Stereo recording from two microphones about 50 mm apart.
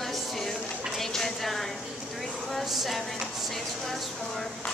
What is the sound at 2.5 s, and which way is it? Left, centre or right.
Speech, centre.